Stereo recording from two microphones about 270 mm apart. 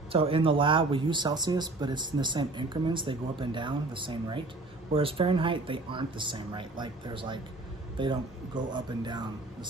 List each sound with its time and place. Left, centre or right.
0.1 s speech: centre